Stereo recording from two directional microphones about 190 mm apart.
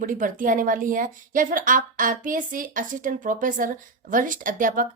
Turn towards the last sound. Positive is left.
turn(degrees=-45)  # may be behind; listen again after turning